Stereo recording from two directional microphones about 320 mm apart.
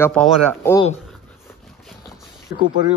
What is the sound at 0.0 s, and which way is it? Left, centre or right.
Speech, centre.